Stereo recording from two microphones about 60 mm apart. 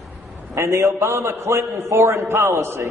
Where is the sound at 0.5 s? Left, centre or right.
Right.